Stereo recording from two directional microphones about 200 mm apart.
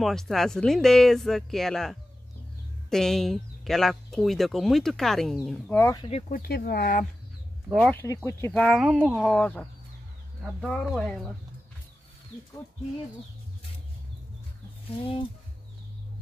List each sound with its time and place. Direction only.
0.0 s speech: centre (ahead or behind)
5.8 s speech: 15° left (ahead or behind)
6.0 s speech: 30° left (ahead or behind)
6.3 s speech: 50° left (ahead or behind)
7.7 s speech: 5° left (ahead or behind)